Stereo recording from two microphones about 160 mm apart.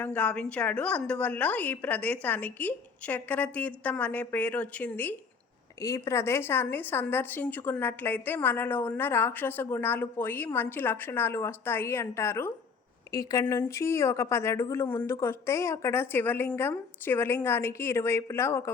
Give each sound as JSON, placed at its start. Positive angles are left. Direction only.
{"t": 0.0, "sound": "a woman's voice", "side_deg": 10}